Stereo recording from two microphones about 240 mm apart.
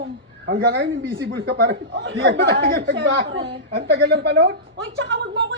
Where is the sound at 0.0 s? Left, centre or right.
Right.